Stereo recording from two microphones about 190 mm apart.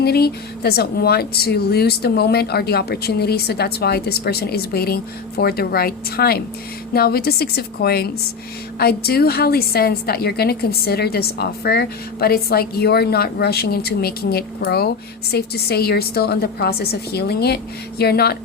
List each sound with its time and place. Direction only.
0.0 s a woman's voice: 55° left (ahead or behind)